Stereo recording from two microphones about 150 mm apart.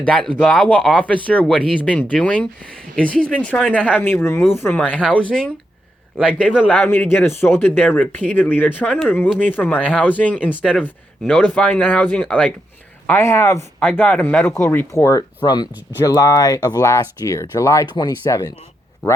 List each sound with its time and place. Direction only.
0.0 s speech: 5° left (ahead or behind); by 18.5 s 25° left (ahead or behind)